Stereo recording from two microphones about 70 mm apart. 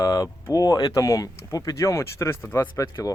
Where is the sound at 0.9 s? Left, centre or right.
Left.